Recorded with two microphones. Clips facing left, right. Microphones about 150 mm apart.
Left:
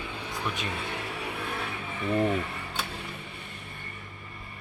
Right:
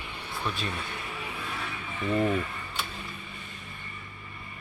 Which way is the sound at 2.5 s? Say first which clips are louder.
Left 1 dB; 70° left (ahead or behind).